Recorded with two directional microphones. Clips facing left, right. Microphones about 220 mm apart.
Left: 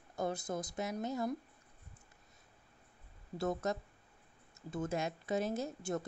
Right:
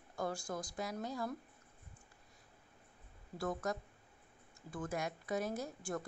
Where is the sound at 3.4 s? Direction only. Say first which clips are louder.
Left 3 dB; 25° left (ahead or behind).